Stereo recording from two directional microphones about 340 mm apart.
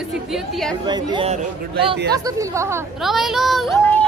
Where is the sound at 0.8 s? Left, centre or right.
Centre.